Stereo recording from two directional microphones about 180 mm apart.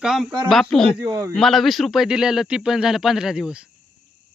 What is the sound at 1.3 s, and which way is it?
A man's voice, centre (ahead or behind).